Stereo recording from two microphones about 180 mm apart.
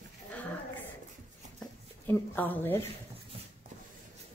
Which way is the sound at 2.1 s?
10° left (ahead or behind).